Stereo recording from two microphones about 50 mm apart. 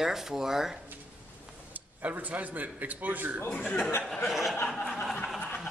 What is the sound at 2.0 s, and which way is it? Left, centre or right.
A man's voice, right.